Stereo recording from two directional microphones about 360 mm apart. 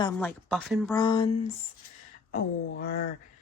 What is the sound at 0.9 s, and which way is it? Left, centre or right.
Speech, centre.